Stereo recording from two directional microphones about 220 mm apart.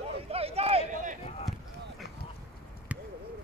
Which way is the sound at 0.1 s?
25° right (ahead or behind).